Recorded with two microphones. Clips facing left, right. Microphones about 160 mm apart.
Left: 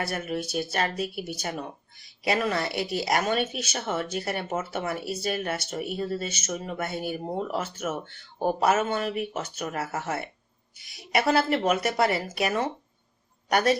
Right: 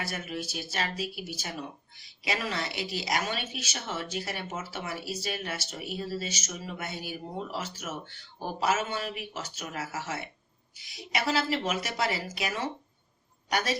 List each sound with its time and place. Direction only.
0.1 s speech: 50° left (ahead or behind)